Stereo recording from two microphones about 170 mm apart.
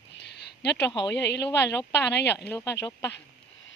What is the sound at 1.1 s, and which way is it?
Speech, 85° left.